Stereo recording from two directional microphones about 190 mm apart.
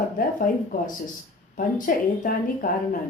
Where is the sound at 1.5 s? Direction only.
45° left (ahead or behind).